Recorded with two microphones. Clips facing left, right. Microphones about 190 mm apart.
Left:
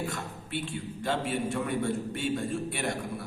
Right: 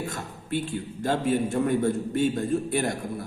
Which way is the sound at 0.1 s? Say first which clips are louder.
Right 5 dB; 40° right (ahead or behind).